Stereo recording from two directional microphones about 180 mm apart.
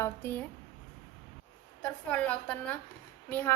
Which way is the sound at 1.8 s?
5° left (ahead or behind).